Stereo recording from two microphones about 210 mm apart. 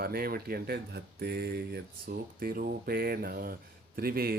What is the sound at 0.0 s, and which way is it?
Speech, 45° right (ahead or behind).